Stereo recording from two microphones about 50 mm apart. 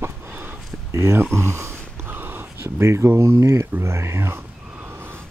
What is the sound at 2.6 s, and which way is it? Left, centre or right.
Speech, right.